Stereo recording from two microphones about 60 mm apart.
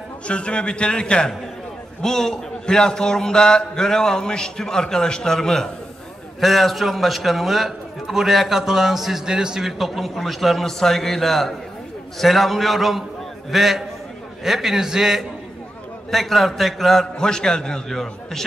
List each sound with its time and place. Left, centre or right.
0.3 s a man's voice: centre
9.7 s a man's voice: centre